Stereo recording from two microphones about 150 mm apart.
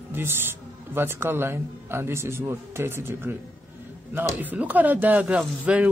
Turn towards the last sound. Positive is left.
turn(degrees=-10)  # may be behind; listen again after turning